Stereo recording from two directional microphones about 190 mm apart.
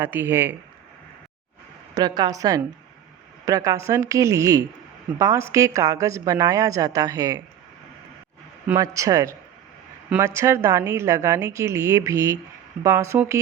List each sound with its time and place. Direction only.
0.0 s a woman's voice: 10° right (ahead or behind)
2.0 s a woman's voice: 20° right (ahead or behind)
8.7 s a woman's voice: 20° right (ahead or behind)